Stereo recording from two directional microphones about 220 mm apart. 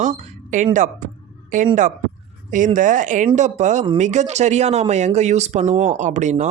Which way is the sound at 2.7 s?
35° right (ahead or behind).